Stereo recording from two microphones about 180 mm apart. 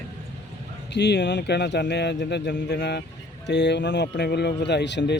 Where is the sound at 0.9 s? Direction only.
70° left (ahead or behind).